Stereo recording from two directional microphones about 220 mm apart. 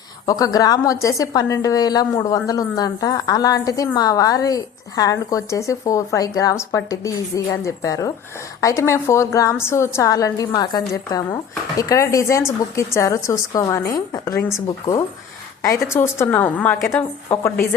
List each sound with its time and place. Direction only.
0.3 s a woman's voice: 15° left (ahead or behind)